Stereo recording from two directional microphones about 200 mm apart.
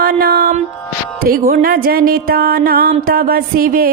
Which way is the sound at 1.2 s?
45° right (ahead or behind).